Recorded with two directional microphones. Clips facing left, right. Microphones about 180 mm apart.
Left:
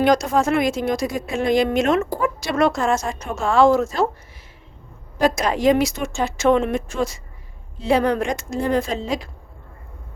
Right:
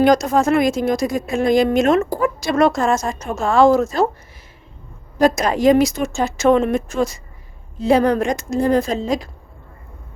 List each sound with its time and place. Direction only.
0.0 s a woman's voice: 40° right (ahead or behind)
5.2 s a woman's voice: 45° right (ahead or behind)